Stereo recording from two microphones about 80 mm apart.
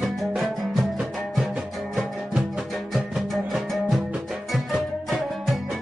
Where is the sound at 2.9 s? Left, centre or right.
Centre.